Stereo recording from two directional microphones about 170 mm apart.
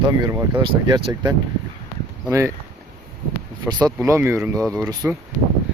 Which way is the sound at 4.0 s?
15° right (ahead or behind).